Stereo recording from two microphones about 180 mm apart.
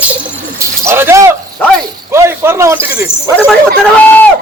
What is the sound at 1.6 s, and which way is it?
Speech, 10° left (ahead or behind).